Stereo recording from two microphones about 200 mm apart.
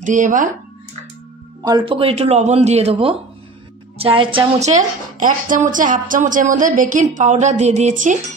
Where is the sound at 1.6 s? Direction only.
25° right (ahead or behind).